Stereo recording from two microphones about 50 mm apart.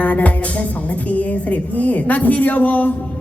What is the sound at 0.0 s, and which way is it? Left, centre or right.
A woman's voice, left.